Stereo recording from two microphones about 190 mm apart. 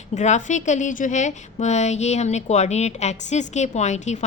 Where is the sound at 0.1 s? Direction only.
40° left (ahead or behind).